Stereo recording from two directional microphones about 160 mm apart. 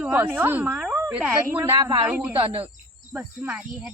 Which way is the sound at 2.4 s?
30° right (ahead or behind).